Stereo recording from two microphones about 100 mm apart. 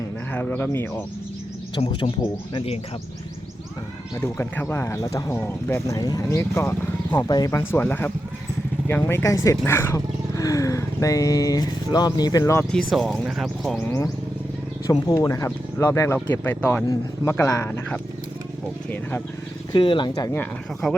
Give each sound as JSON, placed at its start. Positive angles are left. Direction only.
{"t": 0.3, "sound": "speech", "side_deg": 20}
{"t": 1.9, "sound": "speech", "side_deg": 55}
{"t": 4.5, "sound": "speech", "side_deg": 25}
{"t": 7.1, "sound": "speech", "side_deg": 40}
{"t": 7.5, "sound": "speech", "side_deg": 20}
{"t": 12.7, "sound": "speech", "side_deg": 0}
{"t": 13.8, "sound": "speech", "side_deg": 25}
{"t": 14.8, "sound": "speech", "side_deg": 35}
{"t": 16.1, "sound": "speech", "side_deg": 20}
{"t": 19.7, "sound": "speech", "side_deg": 55}